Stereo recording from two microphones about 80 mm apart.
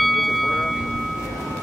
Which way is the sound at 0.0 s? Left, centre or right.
Centre.